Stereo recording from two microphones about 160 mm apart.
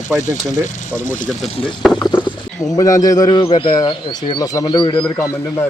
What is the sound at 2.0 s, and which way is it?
Speech, 25° left (ahead or behind).